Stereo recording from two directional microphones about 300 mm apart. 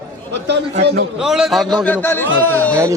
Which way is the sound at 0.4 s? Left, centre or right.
Right.